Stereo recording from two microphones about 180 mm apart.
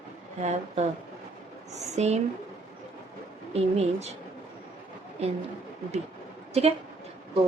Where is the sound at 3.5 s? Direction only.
35° right (ahead or behind).